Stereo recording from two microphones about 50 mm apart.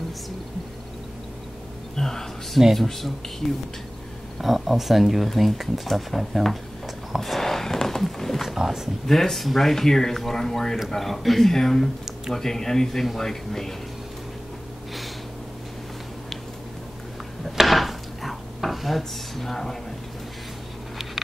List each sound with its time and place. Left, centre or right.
2.0 s speech: centre
7.2 s a sound: centre
8.5 s speech: centre
9.0 s speech: centre
17.5 s dishes: centre